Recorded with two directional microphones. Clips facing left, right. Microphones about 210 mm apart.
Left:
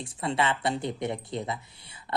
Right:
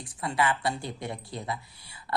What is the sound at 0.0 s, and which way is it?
Speech, 25° left (ahead or behind).